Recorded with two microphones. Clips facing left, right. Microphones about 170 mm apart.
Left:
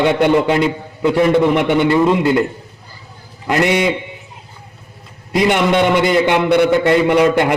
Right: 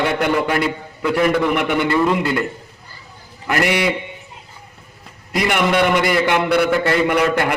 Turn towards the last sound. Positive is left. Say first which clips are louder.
# left 5 dB
turn(degrees=20)  # may be behind; listen again after turning